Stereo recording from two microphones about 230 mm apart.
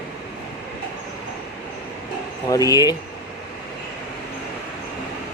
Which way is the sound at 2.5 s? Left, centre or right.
Centre.